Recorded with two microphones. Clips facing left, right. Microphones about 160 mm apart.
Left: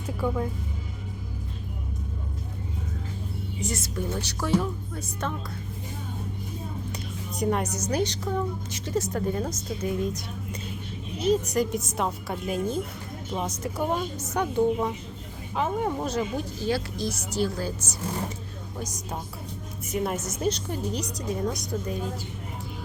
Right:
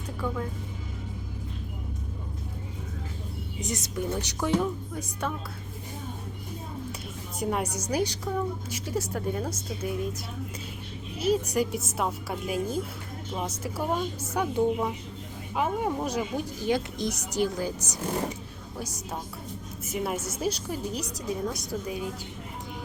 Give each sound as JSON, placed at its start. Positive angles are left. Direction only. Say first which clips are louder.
{"t": 3.6, "sound": "speech", "louder": "even", "side_deg": -20}
{"t": 7.3, "sound": "speech", "louder": "left 3 dB", "side_deg": -5}
{"t": 11.2, "sound": "a woman's voice", "louder": "left 2 dB", "side_deg": -10}
{"t": 19.9, "sound": "a woman's voice", "louder": "left 2 dB", "side_deg": -5}